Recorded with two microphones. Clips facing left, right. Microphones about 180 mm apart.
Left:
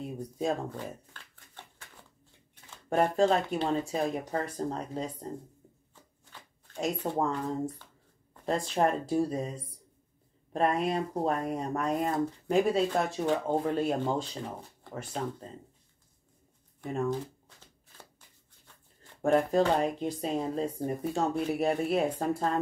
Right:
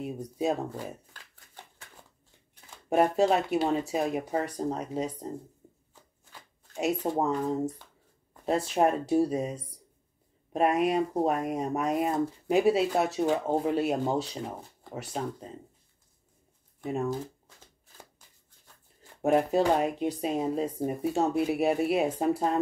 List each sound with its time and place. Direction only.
0.0 s speech: 5° right (ahead or behind)
2.7 s speech: 10° right (ahead or behind)
6.7 s speech: 10° right (ahead or behind)
10.5 s speech: 10° right (ahead or behind)
19.2 s speech: 10° right (ahead or behind)